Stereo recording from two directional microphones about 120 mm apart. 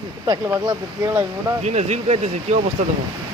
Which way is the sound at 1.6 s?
70° right (ahead or behind).